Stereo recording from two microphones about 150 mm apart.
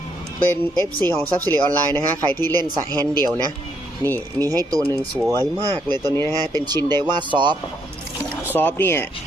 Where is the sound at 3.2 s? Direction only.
25° right (ahead or behind).